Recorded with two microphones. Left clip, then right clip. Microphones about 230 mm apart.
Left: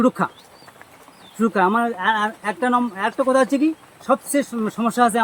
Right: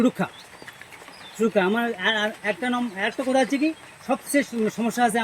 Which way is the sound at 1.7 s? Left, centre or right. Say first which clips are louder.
Left 4 dB; centre.